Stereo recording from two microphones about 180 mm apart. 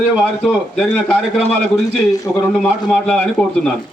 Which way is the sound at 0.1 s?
Centre (ahead or behind).